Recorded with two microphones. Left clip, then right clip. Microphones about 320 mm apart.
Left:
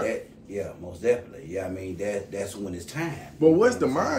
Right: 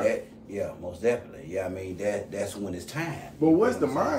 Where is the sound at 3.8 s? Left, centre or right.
Left.